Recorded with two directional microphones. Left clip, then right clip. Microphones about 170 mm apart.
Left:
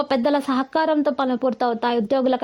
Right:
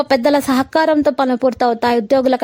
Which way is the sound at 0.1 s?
40° right (ahead or behind).